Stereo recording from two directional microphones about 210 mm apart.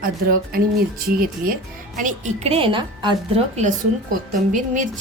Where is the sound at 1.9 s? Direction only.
35° right (ahead or behind).